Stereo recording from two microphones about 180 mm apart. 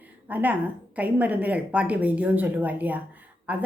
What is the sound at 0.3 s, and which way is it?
A woman's voice, 10° right (ahead or behind).